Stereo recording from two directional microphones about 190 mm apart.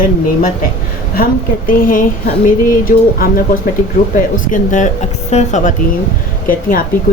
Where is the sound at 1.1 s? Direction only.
50° left (ahead or behind).